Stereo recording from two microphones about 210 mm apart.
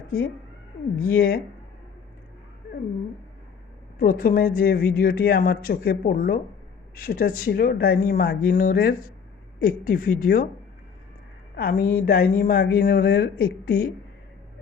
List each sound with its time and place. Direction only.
0.9 s speech: 45° left (ahead or behind)
3.9 s speech: 45° left (ahead or behind)
11.5 s speech: 45° left (ahead or behind)